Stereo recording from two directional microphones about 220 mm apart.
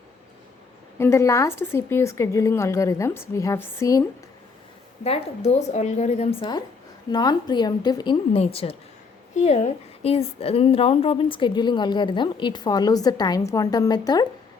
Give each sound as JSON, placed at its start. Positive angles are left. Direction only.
{"t": 0.9, "sound": "a woman's voice", "side_deg": 10}
{"t": 5.0, "sound": "a woman's voice", "side_deg": 30}
{"t": 7.1, "sound": "a woman's voice", "side_deg": 20}